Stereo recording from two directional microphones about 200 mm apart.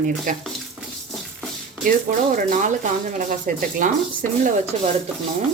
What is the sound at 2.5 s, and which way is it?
Speech, 40° right (ahead or behind).